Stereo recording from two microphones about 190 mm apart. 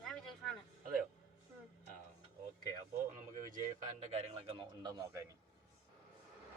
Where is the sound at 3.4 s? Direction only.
40° right (ahead or behind).